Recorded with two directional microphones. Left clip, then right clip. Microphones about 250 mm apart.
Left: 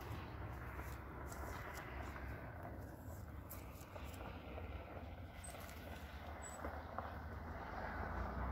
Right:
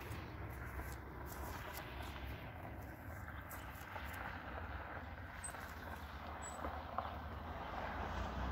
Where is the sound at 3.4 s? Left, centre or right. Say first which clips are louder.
Right 6 dB; centre; by 8.5 s right.